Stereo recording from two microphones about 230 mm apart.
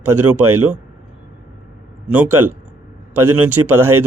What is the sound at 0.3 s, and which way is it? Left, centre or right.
Speech, right.